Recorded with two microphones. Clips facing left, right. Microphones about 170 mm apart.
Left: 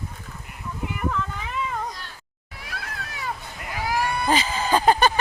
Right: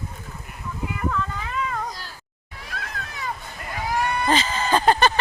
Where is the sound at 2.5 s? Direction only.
10° left (ahead or behind).